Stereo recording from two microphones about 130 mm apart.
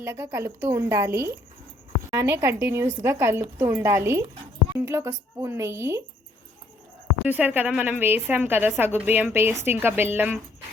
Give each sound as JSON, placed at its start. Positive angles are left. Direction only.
{"t": 0.0, "sound": "a woman's voice", "side_deg": -20}
{"t": 7.3, "sound": "a woman's voice", "side_deg": -15}